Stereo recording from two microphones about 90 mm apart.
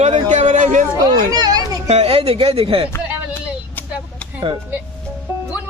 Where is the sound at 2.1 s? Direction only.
90° right.